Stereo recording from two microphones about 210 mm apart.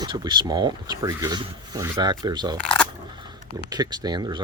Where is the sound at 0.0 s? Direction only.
20° right (ahead or behind).